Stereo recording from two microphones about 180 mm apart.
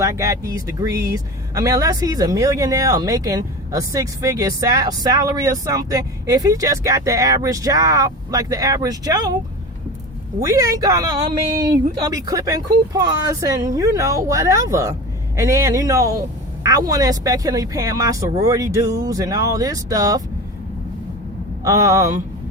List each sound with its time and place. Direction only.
0.0 s speech: 20° right (ahead or behind)
10.4 s speech: 20° right (ahead or behind)
21.6 s speech: 20° right (ahead or behind)